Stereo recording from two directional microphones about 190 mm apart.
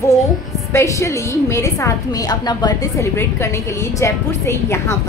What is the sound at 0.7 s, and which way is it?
A woman's voice, 15° left (ahead or behind).